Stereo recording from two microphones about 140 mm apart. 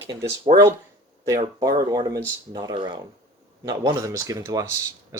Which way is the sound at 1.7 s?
30° right (ahead or behind).